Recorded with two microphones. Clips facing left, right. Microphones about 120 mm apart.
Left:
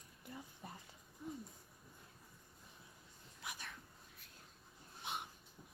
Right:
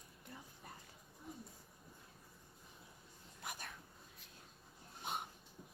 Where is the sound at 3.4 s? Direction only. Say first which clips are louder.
Right 1 dB; 45° right (ahead or behind).